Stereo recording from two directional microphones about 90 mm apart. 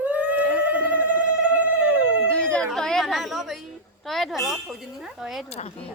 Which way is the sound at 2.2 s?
15° left (ahead or behind).